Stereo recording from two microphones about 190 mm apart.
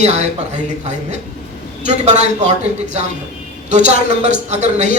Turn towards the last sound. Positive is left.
turn(degrees=-40)  # may be behind; listen again after turning